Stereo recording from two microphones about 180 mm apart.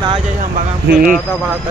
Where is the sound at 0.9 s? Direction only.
55° right (ahead or behind).